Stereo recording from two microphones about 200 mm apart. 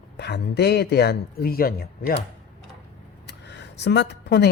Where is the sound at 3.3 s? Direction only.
60° left (ahead or behind).